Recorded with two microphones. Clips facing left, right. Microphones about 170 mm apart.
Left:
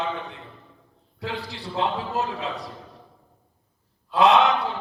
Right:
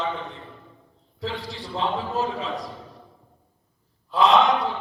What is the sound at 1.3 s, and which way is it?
A man's voice, 65° left (ahead or behind).